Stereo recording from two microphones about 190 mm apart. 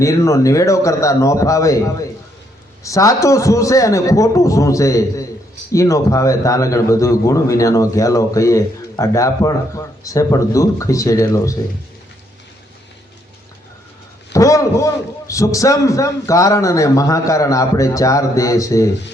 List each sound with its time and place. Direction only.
0.0 s a man's voice: 15° left (ahead or behind)
14.3 s a man's voice: 15° left (ahead or behind)